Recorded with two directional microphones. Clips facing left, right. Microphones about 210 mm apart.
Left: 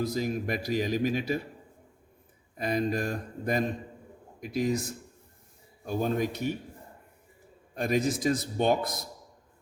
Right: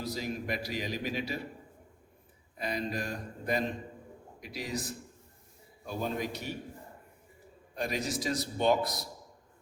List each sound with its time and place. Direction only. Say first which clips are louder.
0.0 s a man's voice: left 6 dB; 50° left (ahead or behind)
2.6 s a man's voice: left 6 dB; 50° left (ahead or behind)
7.8 s a man's voice: left 7 dB; 50° left (ahead or behind)